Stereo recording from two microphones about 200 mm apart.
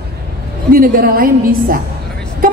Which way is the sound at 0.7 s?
45° right (ahead or behind).